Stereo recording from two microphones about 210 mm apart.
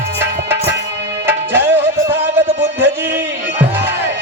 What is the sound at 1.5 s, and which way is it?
Music, 10° right (ahead or behind).